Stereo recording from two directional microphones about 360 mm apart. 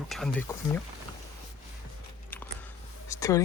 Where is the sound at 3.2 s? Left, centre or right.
Centre.